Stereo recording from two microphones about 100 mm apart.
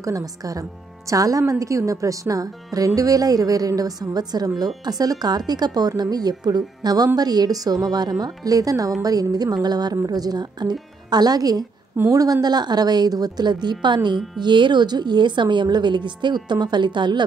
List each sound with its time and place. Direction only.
0.0 s a woman's voice: 35° right (ahead or behind)